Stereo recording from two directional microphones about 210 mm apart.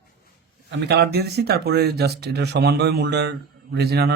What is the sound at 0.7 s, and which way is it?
Speech, 55° right (ahead or behind).